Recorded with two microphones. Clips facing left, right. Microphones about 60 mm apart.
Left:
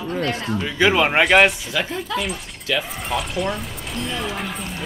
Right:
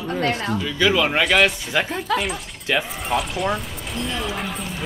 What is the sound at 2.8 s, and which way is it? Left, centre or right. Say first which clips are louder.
Speech: right 3 dB; centre.